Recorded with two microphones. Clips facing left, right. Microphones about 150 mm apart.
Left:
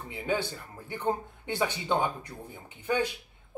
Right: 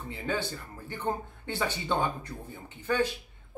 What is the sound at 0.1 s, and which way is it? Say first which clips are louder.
Speech: left 2 dB; 15° left (ahead or behind).